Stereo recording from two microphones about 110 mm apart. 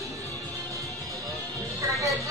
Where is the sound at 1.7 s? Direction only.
30° right (ahead or behind).